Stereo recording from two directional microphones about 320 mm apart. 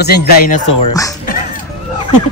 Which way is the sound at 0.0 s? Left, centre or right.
Left.